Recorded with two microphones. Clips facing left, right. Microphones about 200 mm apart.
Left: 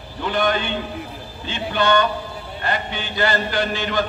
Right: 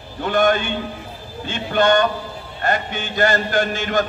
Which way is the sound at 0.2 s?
45° right (ahead or behind).